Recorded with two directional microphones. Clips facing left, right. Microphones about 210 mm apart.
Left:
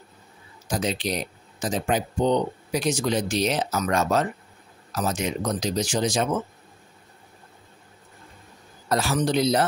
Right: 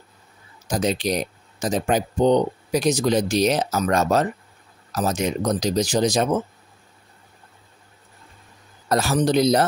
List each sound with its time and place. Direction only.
0.7 s speech: 40° right (ahead or behind)
8.8 s speech: 40° right (ahead or behind)